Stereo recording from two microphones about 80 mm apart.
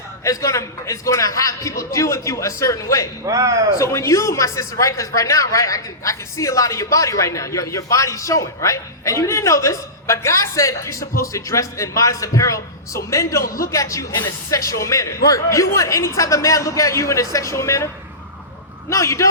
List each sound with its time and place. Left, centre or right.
0.3 s speech: left
3.2 s a man's voice: right
3.8 s speech: left
18.9 s speech: left